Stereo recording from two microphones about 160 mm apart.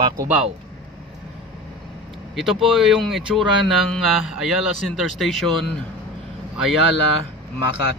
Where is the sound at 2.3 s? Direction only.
Centre (ahead or behind).